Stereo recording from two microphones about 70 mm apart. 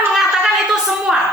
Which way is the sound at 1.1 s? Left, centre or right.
Centre.